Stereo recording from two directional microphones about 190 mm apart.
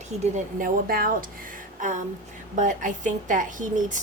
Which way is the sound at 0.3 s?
50° right (ahead or behind).